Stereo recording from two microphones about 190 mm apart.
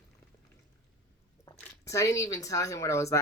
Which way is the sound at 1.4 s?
15° left (ahead or behind).